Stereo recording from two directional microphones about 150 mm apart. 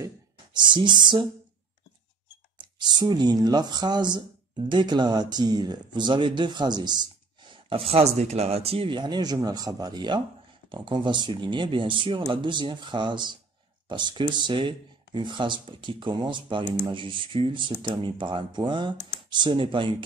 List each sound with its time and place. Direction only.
0.0 s speech: 30° right (ahead or behind)
2.5 s speech: 30° right (ahead or behind)